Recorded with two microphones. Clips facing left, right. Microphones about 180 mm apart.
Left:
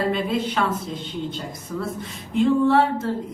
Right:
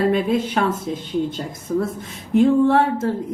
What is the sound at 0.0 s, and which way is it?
Speech, 50° right (ahead or behind).